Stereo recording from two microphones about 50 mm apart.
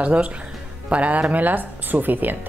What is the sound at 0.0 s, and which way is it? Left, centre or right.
Speech, right.